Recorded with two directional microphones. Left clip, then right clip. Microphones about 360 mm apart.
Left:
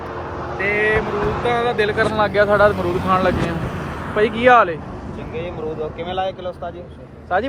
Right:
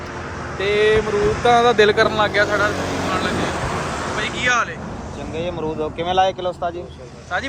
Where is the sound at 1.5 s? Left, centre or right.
Centre.